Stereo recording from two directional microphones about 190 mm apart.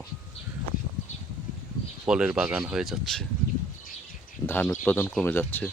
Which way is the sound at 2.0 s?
5° right (ahead or behind).